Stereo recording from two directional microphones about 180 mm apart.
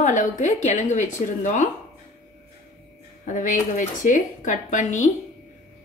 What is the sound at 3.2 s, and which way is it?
A woman's voice, 45° left (ahead or behind).